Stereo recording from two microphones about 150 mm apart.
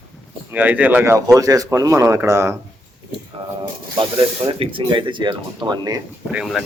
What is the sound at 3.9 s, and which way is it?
Speech, 30° right (ahead or behind).